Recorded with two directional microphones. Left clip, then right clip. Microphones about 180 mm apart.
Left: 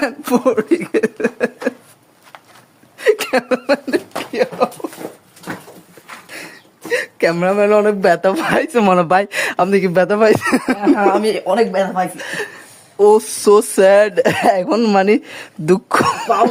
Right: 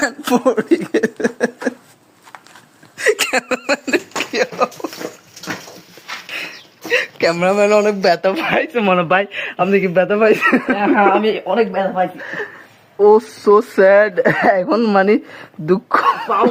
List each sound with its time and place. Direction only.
0.0 s speech: centre (ahead or behind)
3.0 s a sound: 10° left (ahead or behind)
6.3 s a sound: 35° left (ahead or behind)
7.4 s speech: 10° left (ahead or behind); by 10.3 s 40° left (ahead or behind)
10.4 s speech: 65° left (ahead or behind)
10.8 s speech: 20° left (ahead or behind)
12.1 s speech: 30° left (ahead or behind)